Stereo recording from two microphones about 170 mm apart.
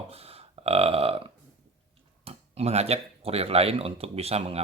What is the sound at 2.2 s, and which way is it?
Speech, 40° right (ahead or behind).